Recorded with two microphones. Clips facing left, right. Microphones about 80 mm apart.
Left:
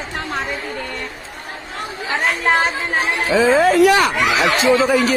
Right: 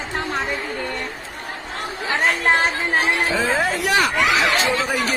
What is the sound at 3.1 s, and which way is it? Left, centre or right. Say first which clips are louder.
Speech: left 6 dB; left.